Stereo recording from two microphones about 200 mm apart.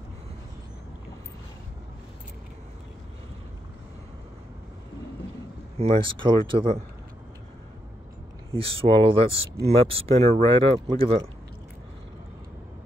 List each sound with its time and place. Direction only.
5.8 s speech: 25° right (ahead or behind)
8.5 s speech: 25° right (ahead or behind)